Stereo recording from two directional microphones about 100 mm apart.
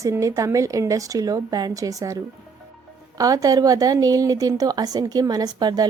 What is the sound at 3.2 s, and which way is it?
Speech, 35° right (ahead or behind).